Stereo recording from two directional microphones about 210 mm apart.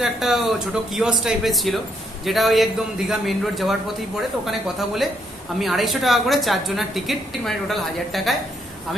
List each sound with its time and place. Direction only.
0.0 s a woman's voice: centre (ahead or behind)